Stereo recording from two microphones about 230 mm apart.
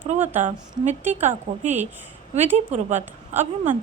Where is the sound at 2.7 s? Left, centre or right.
Right.